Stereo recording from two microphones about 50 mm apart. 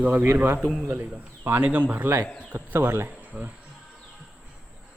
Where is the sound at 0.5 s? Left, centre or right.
Centre.